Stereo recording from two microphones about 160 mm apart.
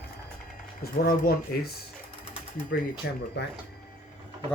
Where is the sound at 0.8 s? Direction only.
65° left (ahead or behind).